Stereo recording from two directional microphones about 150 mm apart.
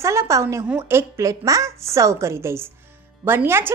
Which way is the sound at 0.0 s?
20° right (ahead or behind).